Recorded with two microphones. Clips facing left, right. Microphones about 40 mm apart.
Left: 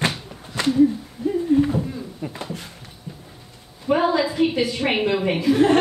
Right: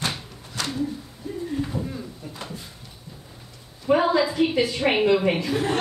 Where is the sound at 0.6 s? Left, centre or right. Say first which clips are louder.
Left 8 dB; left.